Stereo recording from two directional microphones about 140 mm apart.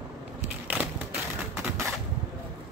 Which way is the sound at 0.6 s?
15° right (ahead or behind).